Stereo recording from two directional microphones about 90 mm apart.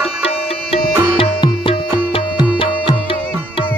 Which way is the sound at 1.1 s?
80° left.